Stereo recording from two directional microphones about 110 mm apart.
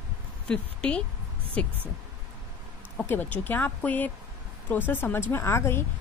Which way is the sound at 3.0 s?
15° left (ahead or behind).